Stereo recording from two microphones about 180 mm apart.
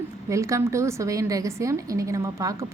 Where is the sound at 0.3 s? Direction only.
15° right (ahead or behind).